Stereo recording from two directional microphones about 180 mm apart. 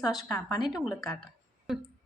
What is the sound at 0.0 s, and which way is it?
A woman's voice, centre (ahead or behind).